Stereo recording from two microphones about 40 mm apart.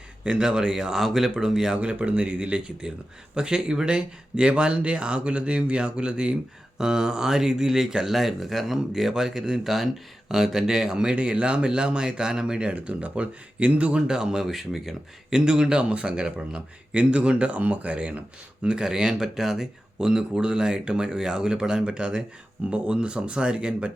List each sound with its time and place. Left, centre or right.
0.3 s speech: centre
1.7 s speech: right
11.1 s speech: right
14.1 s speech: centre
14.4 s speech: centre
15.3 s speech: right
18.6 s speech: right